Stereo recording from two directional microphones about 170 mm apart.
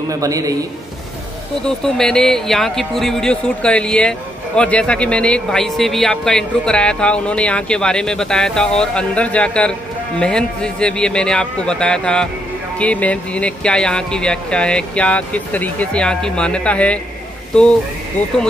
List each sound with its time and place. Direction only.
0.1 s a man's voice: 20° right (ahead or behind)
1.8 s a man's voice: 5° left (ahead or behind)